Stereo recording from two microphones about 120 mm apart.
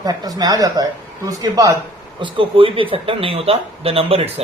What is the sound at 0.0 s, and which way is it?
A woman's voice, 30° right (ahead or behind).